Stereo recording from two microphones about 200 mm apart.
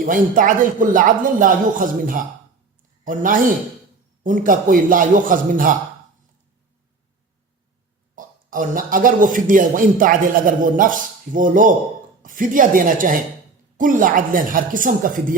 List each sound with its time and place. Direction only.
0.0 s a man's voice: 40° right (ahead or behind)
8.1 s a man's voice: 45° right (ahead or behind)